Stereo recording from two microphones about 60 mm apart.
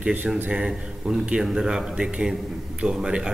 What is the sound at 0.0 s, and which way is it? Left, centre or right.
Speech, right.